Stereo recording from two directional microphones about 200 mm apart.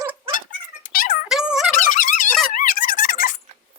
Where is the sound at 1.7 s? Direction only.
40° left (ahead or behind).